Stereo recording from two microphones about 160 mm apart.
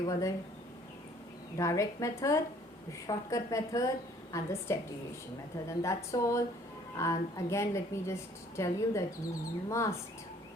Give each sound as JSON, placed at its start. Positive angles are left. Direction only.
{"t": 0.0, "sound": "a woman's voice", "side_deg": 20}
{"t": 1.5, "sound": "a woman's voice", "side_deg": 20}